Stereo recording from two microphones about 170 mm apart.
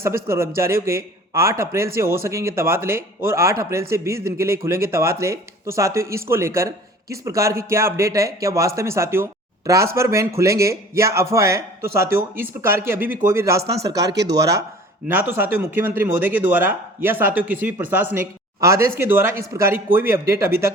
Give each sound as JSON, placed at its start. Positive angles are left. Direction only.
{"t": 0.3, "sound": "a man's voice", "side_deg": -15}
{"t": 13.6, "sound": "speech", "side_deg": -70}
{"t": 13.8, "sound": "a man's voice", "side_deg": -20}